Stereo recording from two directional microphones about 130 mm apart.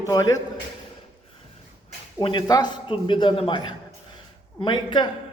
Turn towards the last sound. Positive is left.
turn(degrees=35)  # may be behind; listen again after turning